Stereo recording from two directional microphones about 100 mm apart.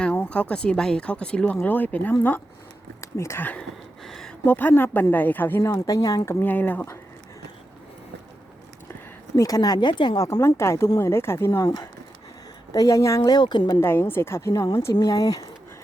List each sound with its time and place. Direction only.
0.0 s speech: 15° left (ahead or behind)
3.0 s speech: 30° left (ahead or behind)
3.4 s speech: 15° left (ahead or behind)
4.0 s a sound: 5° left (ahead or behind)
4.4 s a woman's voice: 20° left (ahead or behind); by 6.3 s 35° left (ahead or behind)
6.4 s a woman's voice: 20° left (ahead or behind)
8.9 s speech: 35° left (ahead or behind); by 10.2 s 50° left (ahead or behind)
10.2 s a woman's voice: 30° left (ahead or behind)
12.7 s a woman's voice: 35° left (ahead or behind)
13.7 s a woman's voice: 25° left (ahead or behind)